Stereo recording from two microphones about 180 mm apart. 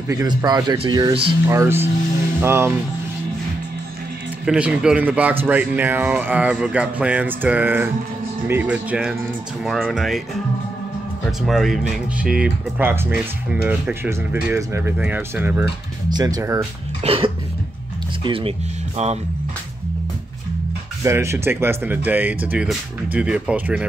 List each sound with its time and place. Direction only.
0.1 s speech: 20° right (ahead or behind)
1.5 s speech: 15° right (ahead or behind)
4.5 s speech: 5° right (ahead or behind)
11.4 s speech: centre (ahead or behind)
16.1 s speech: 20° right (ahead or behind)
17.0 s cough: 30° right (ahead or behind)
18.2 s speech: 30° right (ahead or behind)
21.0 s speech: 15° right (ahead or behind)